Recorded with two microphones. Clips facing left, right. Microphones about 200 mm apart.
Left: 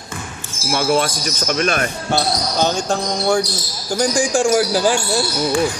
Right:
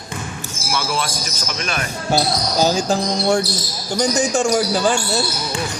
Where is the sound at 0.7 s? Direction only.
50° left (ahead or behind).